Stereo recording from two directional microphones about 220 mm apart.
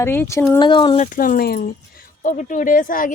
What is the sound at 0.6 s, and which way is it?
Speech, 20° left (ahead or behind).